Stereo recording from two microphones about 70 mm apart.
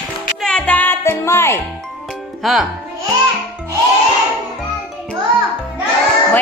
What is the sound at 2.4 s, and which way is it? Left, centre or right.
Speech, centre.